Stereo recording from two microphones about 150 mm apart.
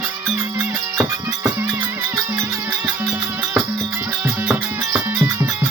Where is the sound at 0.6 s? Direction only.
10° right (ahead or behind).